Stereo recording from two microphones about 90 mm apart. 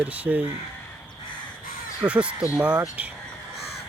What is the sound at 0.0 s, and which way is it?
Speech, 15° right (ahead or behind).